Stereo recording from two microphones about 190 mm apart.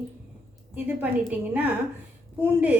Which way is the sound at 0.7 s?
10° right (ahead or behind).